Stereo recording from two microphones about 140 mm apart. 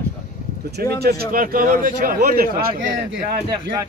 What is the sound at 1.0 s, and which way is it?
Speech, 90° right.